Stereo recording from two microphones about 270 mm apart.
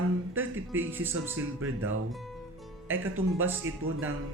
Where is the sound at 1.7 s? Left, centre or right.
Right.